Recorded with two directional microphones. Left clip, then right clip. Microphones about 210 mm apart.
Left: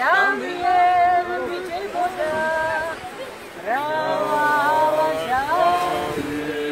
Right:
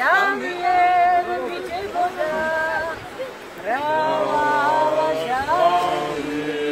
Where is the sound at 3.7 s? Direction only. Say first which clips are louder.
Right 2 dB; 10° right (ahead or behind).